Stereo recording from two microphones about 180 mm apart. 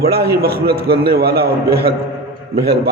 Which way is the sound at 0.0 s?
60° right (ahead or behind).